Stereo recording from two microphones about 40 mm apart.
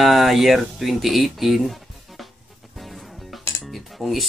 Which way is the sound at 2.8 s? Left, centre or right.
Centre.